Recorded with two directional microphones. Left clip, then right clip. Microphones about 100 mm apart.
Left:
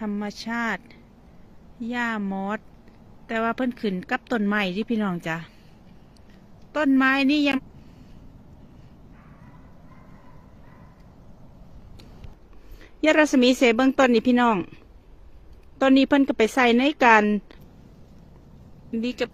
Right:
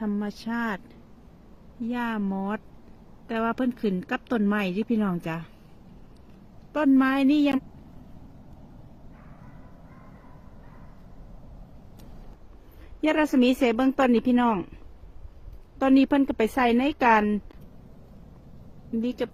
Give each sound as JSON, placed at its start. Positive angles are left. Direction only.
{"t": 0.0, "sound": "a woman's voice", "side_deg": -40}
{"t": 6.7, "sound": "a woman's voice", "side_deg": -50}
{"t": 13.0, "sound": "a woman's voice", "side_deg": 15}
{"t": 15.8, "sound": "a woman's voice", "side_deg": 10}
{"t": 18.9, "sound": "speech", "side_deg": -25}